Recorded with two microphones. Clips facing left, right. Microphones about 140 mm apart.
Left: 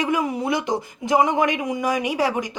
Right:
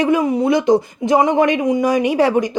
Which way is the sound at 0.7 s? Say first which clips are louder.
Right 8 dB; 20° right (ahead or behind).